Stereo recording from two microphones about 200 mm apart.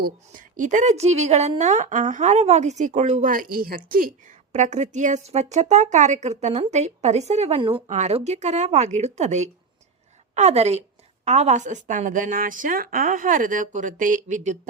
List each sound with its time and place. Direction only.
0.0 s a woman's voice: 40° right (ahead or behind)